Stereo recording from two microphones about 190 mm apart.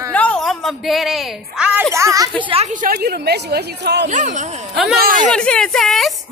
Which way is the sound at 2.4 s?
35° right (ahead or behind).